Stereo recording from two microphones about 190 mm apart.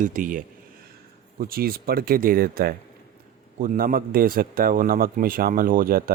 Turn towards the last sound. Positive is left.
turn(degrees=-50)  # may be behind; listen again after turning